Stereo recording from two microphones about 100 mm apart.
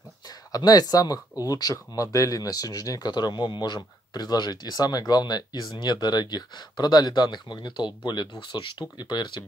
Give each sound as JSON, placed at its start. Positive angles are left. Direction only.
{"t": 0.5, "sound": "speech", "side_deg": 40}